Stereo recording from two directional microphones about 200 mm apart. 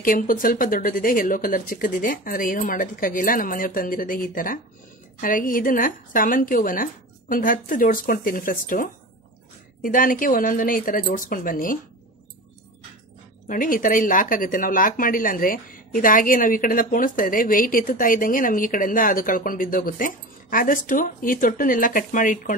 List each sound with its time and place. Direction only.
0.0 s speech: 45° left (ahead or behind)
13.5 s speech: 45° left (ahead or behind)